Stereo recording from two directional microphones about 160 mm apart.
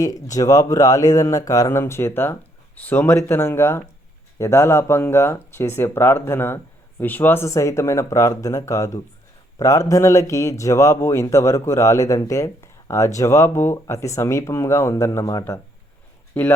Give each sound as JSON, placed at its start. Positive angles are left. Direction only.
{"t": 0.0, "sound": "a man's voice", "side_deg": 20}
{"t": 16.4, "sound": "speech", "side_deg": 10}